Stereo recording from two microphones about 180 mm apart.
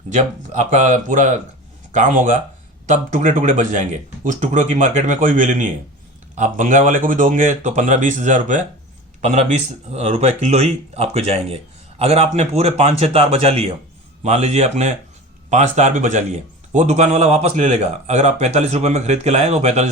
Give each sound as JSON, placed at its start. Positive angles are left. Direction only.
{"t": 0.1, "sound": "speech", "side_deg": -40}